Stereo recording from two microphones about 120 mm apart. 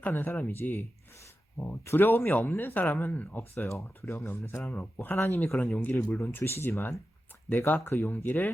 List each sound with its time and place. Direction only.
0.0 s speech: 15° left (ahead or behind)
5.5 s speech: centre (ahead or behind)
5.7 s speech: 15° left (ahead or behind)